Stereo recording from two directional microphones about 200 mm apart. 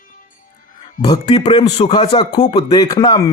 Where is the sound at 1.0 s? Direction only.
20° left (ahead or behind).